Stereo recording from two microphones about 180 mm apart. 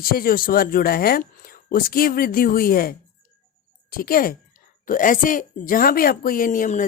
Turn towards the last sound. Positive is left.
turn(degrees=45)  # may be behind; listen again after turning